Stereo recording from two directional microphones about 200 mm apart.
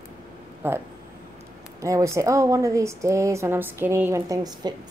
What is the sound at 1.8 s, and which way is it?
Speech, 15° right (ahead or behind).